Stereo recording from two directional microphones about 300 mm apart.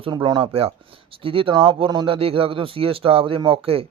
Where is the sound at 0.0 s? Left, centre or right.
Centre.